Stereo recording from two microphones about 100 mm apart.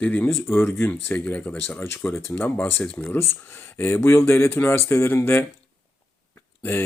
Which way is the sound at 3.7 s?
25° left (ahead or behind).